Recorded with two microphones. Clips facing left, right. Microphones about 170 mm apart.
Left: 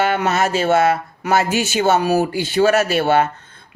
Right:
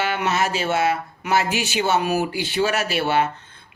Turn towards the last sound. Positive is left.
turn(degrees=45)  # may be behind; listen again after turning